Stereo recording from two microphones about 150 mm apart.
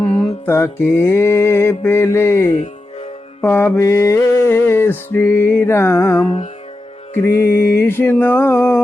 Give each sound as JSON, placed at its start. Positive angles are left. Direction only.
{"t": 0.0, "sound": "music", "side_deg": 5}
{"t": 0.4, "sound": "mantra", "side_deg": 15}